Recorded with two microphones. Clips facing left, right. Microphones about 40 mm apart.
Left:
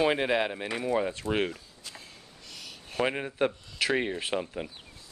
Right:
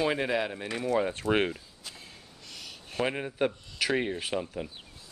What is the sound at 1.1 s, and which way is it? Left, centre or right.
Speech, right.